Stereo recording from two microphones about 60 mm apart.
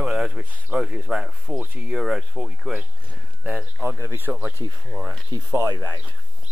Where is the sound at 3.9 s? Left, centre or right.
Right.